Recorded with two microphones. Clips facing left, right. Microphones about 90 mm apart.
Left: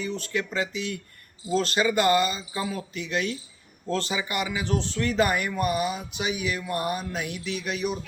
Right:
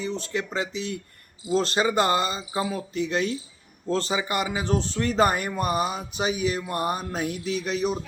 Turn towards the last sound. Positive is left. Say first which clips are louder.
# right 3 dB
turn(degrees=-35)  # may be behind; listen again after turning